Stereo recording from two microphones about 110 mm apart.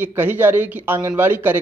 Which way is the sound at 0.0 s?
15° right (ahead or behind).